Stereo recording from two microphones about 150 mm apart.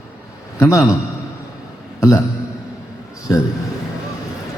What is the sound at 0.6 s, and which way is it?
Speech, 20° left (ahead or behind).